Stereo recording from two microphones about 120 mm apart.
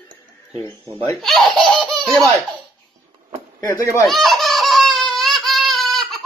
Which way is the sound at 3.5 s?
30° left (ahead or behind).